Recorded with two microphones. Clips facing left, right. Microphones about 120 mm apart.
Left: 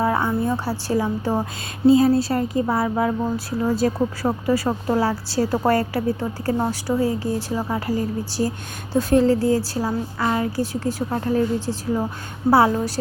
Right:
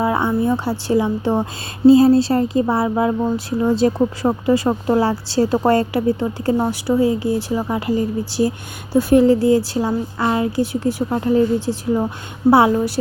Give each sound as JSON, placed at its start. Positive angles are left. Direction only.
{"t": 0.2, "sound": "a woman's voice", "side_deg": -20}
{"t": 1.9, "sound": "speech", "side_deg": -30}